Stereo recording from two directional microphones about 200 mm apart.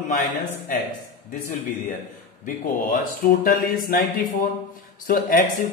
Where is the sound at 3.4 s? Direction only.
45° left (ahead or behind).